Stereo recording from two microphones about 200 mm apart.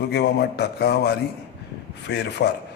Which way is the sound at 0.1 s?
55° left (ahead or behind).